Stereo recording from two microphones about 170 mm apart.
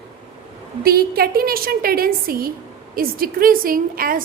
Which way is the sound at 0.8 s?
65° right (ahead or behind).